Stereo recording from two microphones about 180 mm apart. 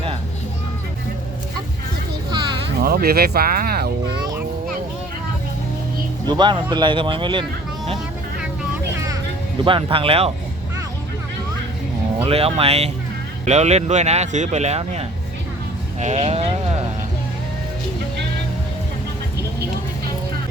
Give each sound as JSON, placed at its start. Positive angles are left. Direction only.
{"t": 2.8, "sound": "speech", "side_deg": -60}
{"t": 6.2, "sound": "speech", "side_deg": -25}
{"t": 9.6, "sound": "speech", "side_deg": -30}
{"t": 12.2, "sound": "speech", "side_deg": -35}